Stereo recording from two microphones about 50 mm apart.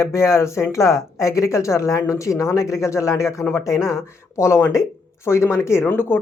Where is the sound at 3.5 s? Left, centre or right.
Left.